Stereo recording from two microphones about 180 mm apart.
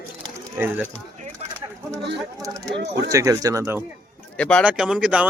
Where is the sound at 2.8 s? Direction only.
70° right (ahead or behind).